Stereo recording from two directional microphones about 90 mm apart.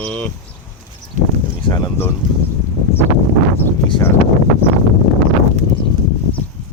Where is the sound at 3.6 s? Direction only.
25° left (ahead or behind).